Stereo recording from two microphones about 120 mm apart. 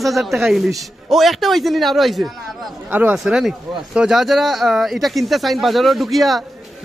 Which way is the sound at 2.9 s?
15° right (ahead or behind).